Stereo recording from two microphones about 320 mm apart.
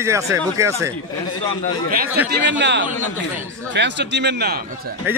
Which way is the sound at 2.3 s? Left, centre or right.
Right.